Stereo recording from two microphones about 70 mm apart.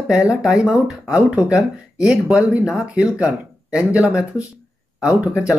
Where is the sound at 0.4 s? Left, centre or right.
Centre.